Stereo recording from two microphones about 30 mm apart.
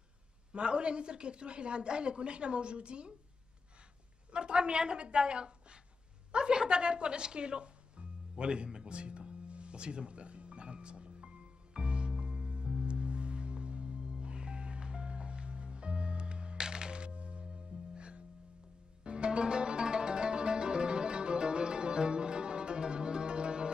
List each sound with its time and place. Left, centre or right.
0.5 s a woman's voice: right
4.3 s a woman's voice: right
8.8 s music: right